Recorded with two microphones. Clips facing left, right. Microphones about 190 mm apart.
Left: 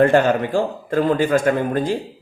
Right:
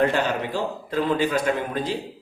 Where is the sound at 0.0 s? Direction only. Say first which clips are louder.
Left 7 dB; 50° left (ahead or behind).